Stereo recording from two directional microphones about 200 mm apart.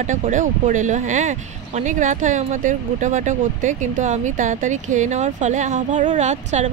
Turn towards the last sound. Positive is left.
turn(degrees=-35)  # may be behind; listen again after turning